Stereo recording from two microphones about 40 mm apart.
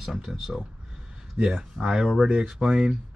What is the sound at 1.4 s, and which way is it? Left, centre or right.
Speech, centre.